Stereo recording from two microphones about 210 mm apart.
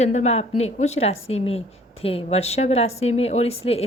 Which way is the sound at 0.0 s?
30° left (ahead or behind).